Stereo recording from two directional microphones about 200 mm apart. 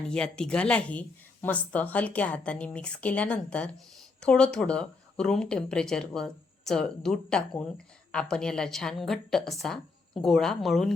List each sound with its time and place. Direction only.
0.1 s speech: 5° left (ahead or behind)